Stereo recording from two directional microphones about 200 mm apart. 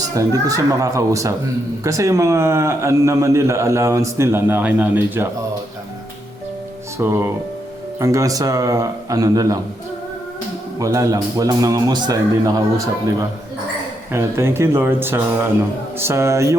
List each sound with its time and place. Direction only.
0.1 s a man's voice: 15° right (ahead or behind)
7.0 s a man's voice: 10° right (ahead or behind)
10.8 s a man's voice: 15° right (ahead or behind)
14.1 s a man's voice: 15° right (ahead or behind)